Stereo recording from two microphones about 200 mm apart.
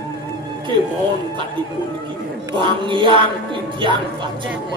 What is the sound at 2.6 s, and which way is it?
Speech, 25° right (ahead or behind).